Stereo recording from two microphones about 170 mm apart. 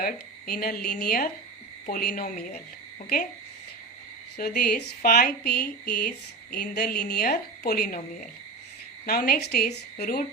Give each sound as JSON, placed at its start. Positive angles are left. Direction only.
{"t": 0.0, "sound": "a woman's voice", "side_deg": 60}
{"t": 4.4, "sound": "a woman's voice", "side_deg": 70}
{"t": 9.0, "sound": "a woman's voice", "side_deg": 60}